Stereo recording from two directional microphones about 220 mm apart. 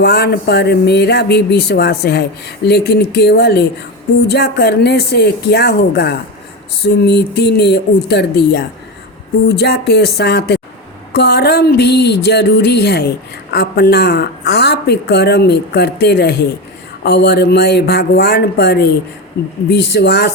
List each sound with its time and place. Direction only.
0.0 s a woman's voice: 50° left (ahead or behind)